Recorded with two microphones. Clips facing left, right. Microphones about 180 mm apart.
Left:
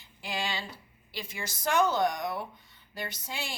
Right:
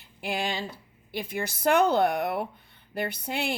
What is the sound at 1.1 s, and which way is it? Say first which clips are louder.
Speech: right 8 dB; 55° right (ahead or behind).